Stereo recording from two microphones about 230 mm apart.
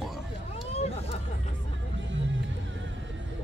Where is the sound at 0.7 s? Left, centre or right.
Left.